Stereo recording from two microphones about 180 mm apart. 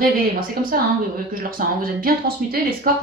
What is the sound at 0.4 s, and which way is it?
Speech, 50° right (ahead or behind).